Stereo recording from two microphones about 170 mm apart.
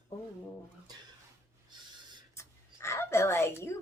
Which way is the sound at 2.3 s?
15° left (ahead or behind).